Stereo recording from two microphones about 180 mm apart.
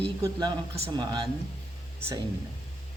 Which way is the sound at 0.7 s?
30° right (ahead or behind).